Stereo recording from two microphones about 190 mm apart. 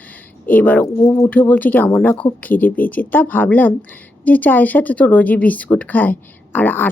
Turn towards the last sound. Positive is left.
turn(degrees=10)  # may be behind; listen again after turning